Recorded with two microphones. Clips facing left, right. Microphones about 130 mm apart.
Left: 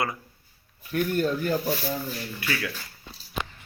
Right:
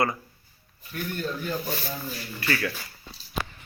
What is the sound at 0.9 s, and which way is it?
Speech, 55° left (ahead or behind).